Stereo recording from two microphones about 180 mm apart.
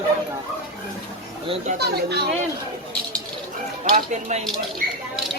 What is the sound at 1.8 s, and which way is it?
Speech, 65° right (ahead or behind).